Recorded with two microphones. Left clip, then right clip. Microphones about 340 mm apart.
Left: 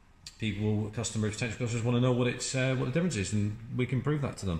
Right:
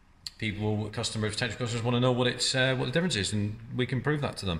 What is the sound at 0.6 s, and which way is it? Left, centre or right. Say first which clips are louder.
A man's voice: right 2 dB; right.